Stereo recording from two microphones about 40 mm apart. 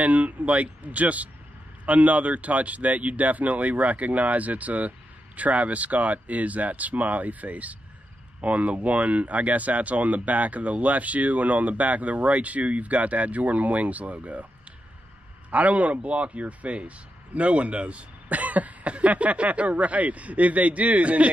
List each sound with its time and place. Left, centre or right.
0.0 s speech: right
15.5 s speech: right